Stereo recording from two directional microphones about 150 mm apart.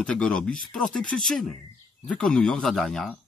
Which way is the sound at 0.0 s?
5° left (ahead or behind).